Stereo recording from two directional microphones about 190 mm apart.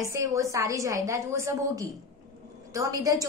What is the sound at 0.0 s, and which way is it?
A woman's voice, 15° right (ahead or behind).